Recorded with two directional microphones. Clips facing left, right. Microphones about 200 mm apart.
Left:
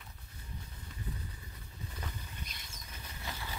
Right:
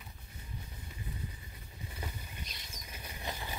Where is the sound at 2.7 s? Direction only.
15° right (ahead or behind).